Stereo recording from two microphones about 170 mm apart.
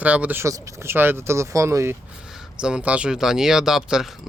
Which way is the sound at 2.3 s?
5° right (ahead or behind).